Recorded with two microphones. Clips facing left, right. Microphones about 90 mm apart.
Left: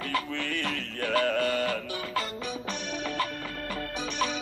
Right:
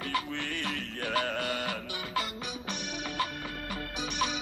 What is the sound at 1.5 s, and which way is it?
Music, 15° right (ahead or behind).